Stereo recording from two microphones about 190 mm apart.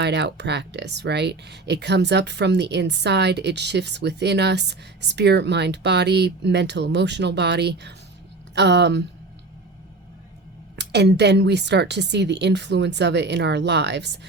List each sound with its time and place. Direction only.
0.0 s speech: 65° right (ahead or behind)
10.8 s speech: 65° right (ahead or behind)